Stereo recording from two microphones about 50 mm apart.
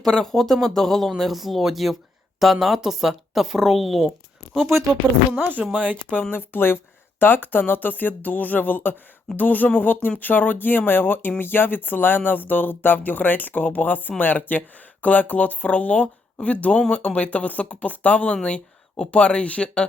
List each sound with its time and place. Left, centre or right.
0.0 s speech: centre
5.4 s speech: right
6.3 s speech: left